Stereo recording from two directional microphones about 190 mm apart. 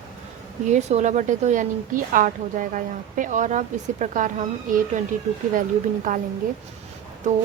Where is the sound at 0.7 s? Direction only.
35° right (ahead or behind).